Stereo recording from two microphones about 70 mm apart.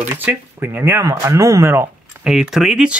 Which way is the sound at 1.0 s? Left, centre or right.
Right.